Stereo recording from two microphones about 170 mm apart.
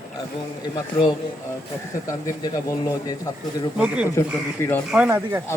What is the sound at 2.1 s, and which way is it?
Speech, 20° left (ahead or behind).